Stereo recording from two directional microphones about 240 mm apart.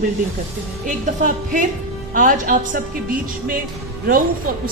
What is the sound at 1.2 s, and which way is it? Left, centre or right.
A woman's voice, right.